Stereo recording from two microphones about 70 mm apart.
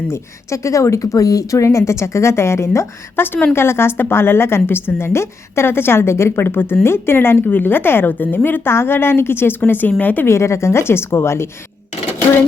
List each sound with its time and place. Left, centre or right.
0.1 s speech: left
3.2 s a woman's voice: left
10.2 s a woman's voice: left